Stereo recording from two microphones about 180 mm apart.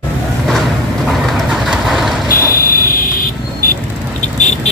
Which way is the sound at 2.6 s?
55° left (ahead or behind).